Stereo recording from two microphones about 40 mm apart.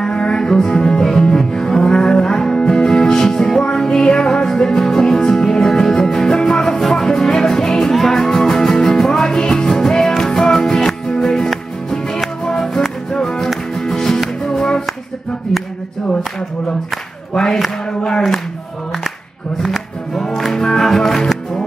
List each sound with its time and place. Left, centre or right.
0.0 s music: left
7.9 s music: centre
19.6 s music: centre
20.2 s music: centre